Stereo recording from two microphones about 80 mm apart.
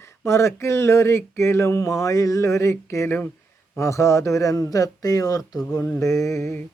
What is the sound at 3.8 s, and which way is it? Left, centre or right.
Speech, left.